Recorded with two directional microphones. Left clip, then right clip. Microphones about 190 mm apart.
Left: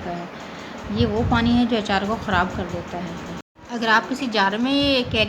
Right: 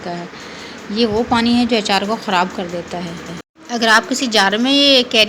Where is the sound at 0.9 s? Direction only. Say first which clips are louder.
Right 6 dB; 10° right (ahead or behind).